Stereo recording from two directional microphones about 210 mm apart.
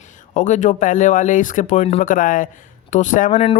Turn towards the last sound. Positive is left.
turn(degrees=35)  # may be behind; listen again after turning